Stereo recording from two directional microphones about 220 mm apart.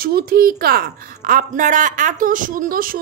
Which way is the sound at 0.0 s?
40° right (ahead or behind).